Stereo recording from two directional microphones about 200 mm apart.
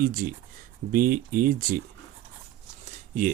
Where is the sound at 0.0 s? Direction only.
45° right (ahead or behind).